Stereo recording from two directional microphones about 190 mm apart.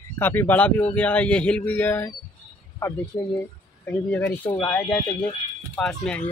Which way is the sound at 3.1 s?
25° left (ahead or behind).